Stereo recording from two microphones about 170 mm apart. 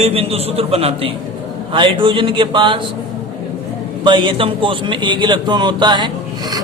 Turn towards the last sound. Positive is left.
turn(degrees=-25)  # may be behind; listen again after turning